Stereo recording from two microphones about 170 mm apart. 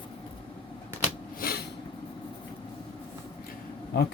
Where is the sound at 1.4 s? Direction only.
60° left (ahead or behind).